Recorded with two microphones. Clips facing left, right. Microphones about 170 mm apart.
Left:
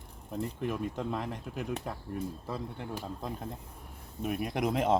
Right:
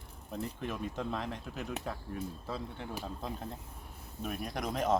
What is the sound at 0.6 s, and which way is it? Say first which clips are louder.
Speech: left 4 dB; 10° left (ahead or behind).